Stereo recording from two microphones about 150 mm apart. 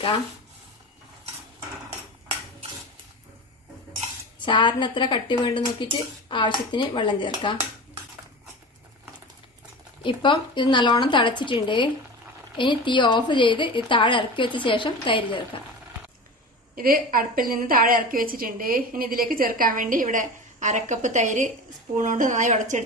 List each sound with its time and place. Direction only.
4.4 s speech: 35° left (ahead or behind)
10.0 s speech: 35° left (ahead or behind)
16.7 s a woman's voice: 70° right (ahead or behind); by 22.8 s 55° right (ahead or behind)